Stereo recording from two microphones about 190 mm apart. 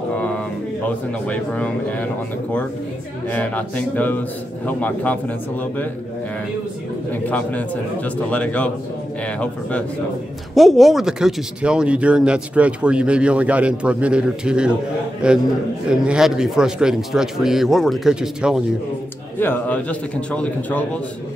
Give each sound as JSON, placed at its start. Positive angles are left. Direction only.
{"t": 1.2, "sound": "a man's voice", "side_deg": 5}
{"t": 3.3, "sound": "a man's voice", "side_deg": 10}
{"t": 7.1, "sound": "a man's voice", "side_deg": 10}
{"t": 19.4, "sound": "a man's voice", "side_deg": 10}